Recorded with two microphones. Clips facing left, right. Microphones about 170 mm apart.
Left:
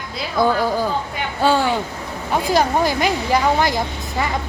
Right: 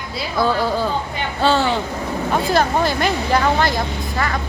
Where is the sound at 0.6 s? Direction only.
10° left (ahead or behind).